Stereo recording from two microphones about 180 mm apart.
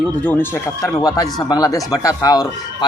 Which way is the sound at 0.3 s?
10° left (ahead or behind).